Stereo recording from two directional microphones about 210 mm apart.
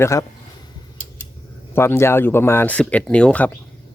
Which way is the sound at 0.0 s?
15° left (ahead or behind).